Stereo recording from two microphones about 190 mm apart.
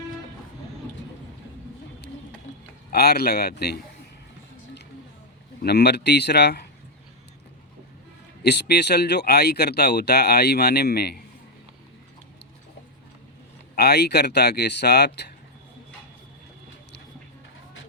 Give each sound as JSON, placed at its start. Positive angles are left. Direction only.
{"t": 2.9, "sound": "speech", "side_deg": 55}
{"t": 5.6, "sound": "speech", "side_deg": 60}
{"t": 8.4, "sound": "speech", "side_deg": 60}
{"t": 13.7, "sound": "speech", "side_deg": 60}